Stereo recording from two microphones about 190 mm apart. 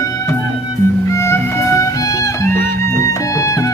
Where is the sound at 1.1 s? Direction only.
15° left (ahead or behind).